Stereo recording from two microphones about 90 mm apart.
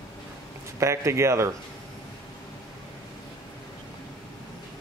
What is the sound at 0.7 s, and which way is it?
Speech, 35° right (ahead or behind).